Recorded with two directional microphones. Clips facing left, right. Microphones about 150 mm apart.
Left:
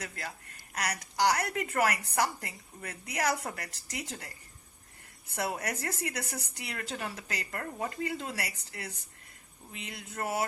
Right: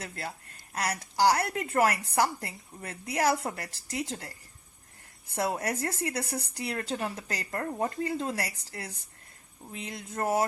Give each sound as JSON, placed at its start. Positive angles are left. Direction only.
{"t": 0.0, "sound": "a woman's voice", "side_deg": -30}
{"t": 5.3, "sound": "a woman's voice", "side_deg": -30}